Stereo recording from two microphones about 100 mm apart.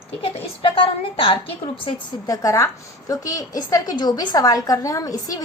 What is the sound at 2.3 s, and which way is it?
A woman's voice, 35° left (ahead or behind).